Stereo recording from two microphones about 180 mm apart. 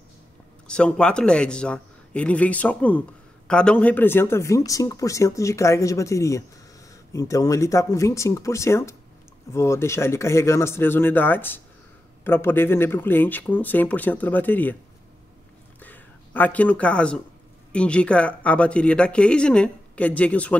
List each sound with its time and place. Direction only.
0.7 s a man's voice: 5° left (ahead or behind)
15.8 s a sound: 10° left (ahead or behind)
17.7 s speech: 5° left (ahead or behind)